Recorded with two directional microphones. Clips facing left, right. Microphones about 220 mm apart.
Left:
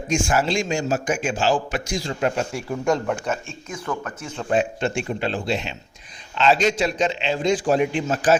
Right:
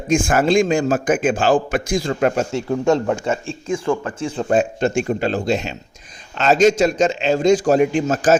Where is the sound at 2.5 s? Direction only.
25° right (ahead or behind).